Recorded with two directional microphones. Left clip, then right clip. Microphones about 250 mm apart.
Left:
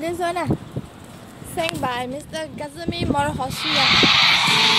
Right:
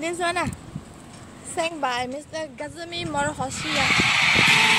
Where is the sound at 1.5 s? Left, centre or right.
Centre.